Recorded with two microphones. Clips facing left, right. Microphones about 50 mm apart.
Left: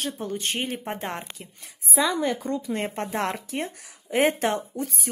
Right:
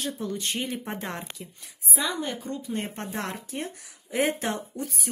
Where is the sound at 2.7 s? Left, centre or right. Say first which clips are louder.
Left 4 dB; left.